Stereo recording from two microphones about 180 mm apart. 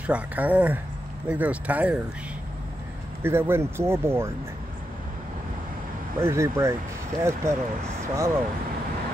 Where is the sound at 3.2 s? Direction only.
15° right (ahead or behind).